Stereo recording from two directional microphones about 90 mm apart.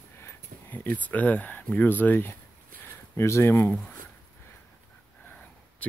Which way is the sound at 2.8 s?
30° left (ahead or behind).